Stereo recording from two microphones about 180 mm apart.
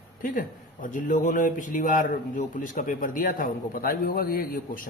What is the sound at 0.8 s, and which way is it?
Speech, 45° left (ahead or behind).